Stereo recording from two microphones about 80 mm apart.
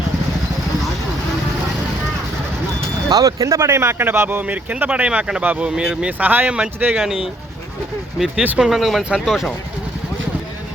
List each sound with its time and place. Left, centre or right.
3.1 s speech: right; by 6.9 s centre
6.9 s speech: centre
8.4 s speech: centre